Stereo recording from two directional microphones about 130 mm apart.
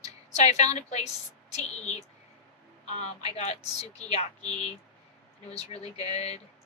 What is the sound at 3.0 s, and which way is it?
A man's voice, 55° left (ahead or behind).